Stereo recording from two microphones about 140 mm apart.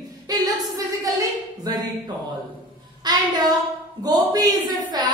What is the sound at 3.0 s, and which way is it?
Speech, 30° right (ahead or behind).